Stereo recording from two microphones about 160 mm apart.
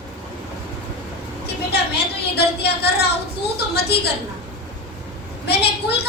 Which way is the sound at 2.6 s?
90° left.